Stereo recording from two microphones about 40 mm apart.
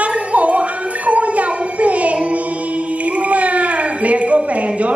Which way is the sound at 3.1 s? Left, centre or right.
Right.